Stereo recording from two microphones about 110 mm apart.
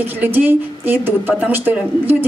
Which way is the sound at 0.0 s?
15° right (ahead or behind).